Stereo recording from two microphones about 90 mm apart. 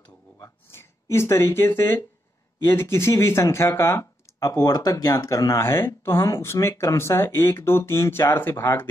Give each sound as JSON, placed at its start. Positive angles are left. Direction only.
{"t": 1.1, "sound": "speech", "side_deg": 30}
{"t": 4.5, "sound": "speech", "side_deg": 45}